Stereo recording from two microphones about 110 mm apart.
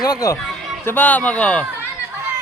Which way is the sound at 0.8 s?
15° left (ahead or behind).